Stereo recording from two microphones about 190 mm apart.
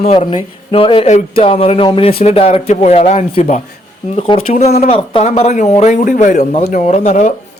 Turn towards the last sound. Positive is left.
turn(degrees=40)  # may be behind; listen again after turning